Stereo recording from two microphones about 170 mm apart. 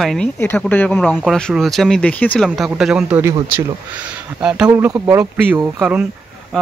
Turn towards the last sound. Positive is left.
turn(degrees=-5)  # may be behind; listen again after turning